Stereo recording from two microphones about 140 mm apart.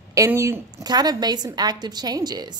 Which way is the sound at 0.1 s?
20° right (ahead or behind).